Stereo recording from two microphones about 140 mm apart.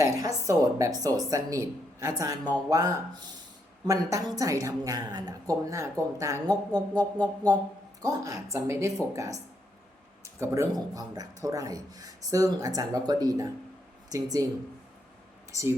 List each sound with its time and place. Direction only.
0.0 s a woman's voice: 25° right (ahead or behind)